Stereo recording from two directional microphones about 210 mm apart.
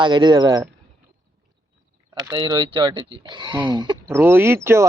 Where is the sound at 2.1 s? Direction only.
20° right (ahead or behind).